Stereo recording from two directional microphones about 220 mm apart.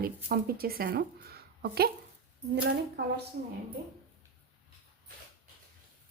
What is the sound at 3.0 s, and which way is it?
Speech, 50° right (ahead or behind).